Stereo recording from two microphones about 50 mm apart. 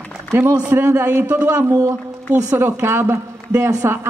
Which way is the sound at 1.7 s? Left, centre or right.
Right.